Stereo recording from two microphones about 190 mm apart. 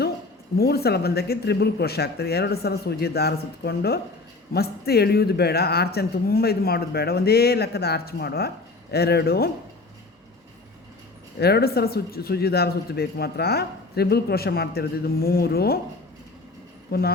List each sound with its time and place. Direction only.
0.5 s speech: 55° left (ahead or behind)
11.3 s speech: 55° left (ahead or behind)
16.9 s speech: 55° left (ahead or behind)